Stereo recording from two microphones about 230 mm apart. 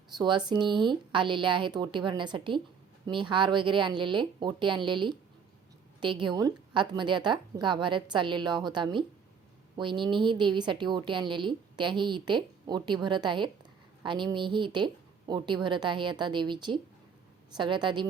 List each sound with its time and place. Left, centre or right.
0.1 s a woman's voice: centre